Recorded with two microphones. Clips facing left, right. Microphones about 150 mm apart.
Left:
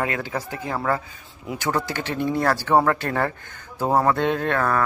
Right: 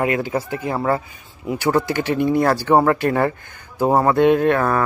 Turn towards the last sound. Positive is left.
turn(degrees=-15)  # may be behind; listen again after turning